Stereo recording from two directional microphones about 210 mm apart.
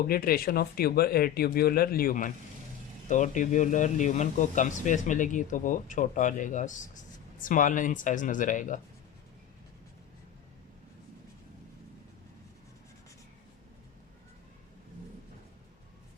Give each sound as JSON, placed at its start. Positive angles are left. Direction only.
{"t": 0.0, "sound": "speech", "side_deg": 45}